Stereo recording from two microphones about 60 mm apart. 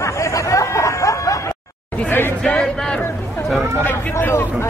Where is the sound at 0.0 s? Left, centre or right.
Left.